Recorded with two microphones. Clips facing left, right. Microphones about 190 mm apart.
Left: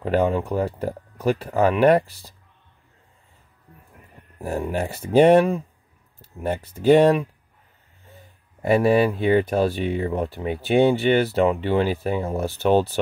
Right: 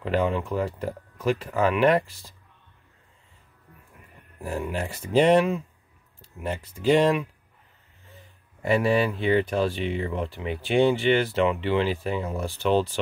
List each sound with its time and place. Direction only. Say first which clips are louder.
0.0 s speech: left 4 dB; 40° left (ahead or behind)
4.4 s speech: left 4 dB; 40° left (ahead or behind)
9.2 s speech: left 4 dB; 40° left (ahead or behind)